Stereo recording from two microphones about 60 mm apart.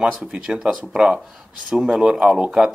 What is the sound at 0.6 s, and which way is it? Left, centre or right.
Speech, centre.